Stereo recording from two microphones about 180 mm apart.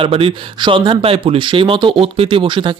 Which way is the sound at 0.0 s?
30° right (ahead or behind).